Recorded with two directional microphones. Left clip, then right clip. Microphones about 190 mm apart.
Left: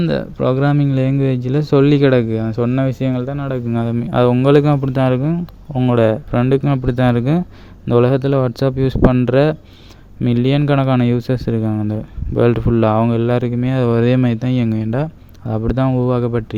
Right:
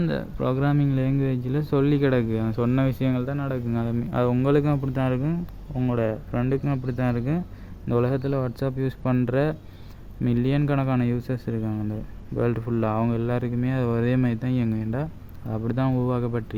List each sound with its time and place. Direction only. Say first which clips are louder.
0.0 s a man's voice: left 9 dB; 35° left (ahead or behind)